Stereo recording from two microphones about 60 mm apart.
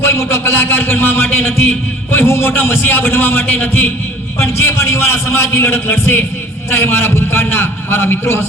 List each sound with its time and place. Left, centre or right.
0.0 s a man's voice: left
4.5 s a man's voice: left